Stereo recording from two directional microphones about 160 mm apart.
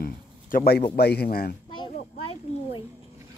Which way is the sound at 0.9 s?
85° left.